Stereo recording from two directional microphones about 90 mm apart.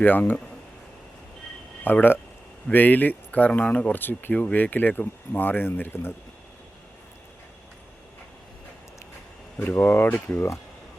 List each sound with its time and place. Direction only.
0.0 s speech: 20° left (ahead or behind)
1.8 s speech: 20° left (ahead or behind)
9.6 s speech: 25° left (ahead or behind)